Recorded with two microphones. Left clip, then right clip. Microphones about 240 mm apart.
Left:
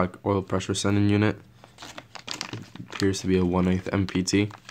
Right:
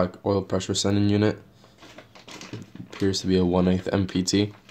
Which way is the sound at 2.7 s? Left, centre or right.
Left.